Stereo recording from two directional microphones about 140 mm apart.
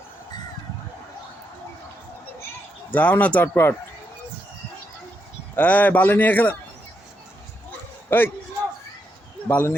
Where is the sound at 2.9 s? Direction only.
10° left (ahead or behind).